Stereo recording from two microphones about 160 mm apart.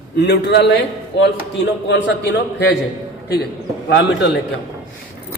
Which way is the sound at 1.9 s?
90° left.